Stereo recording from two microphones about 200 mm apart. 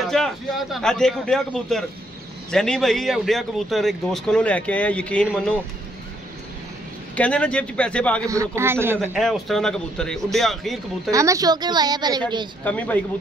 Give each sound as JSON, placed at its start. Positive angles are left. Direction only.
{"t": 0.0, "sound": "speech", "side_deg": 0}
{"t": 7.2, "sound": "speech", "side_deg": 5}
{"t": 8.3, "sound": "a man's voice", "side_deg": -15}
{"t": 9.2, "sound": "speech", "side_deg": 0}
{"t": 11.1, "sound": "a woman's voice", "side_deg": -15}
{"t": 12.6, "sound": "a man's voice", "side_deg": 5}